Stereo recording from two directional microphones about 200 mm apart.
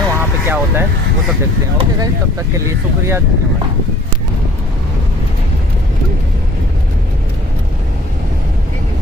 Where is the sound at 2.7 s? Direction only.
15° right (ahead or behind).